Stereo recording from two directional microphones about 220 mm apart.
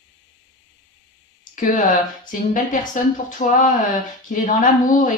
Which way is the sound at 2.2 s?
35° left (ahead or behind).